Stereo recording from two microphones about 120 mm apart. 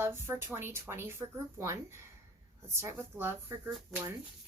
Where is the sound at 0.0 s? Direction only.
20° right (ahead or behind).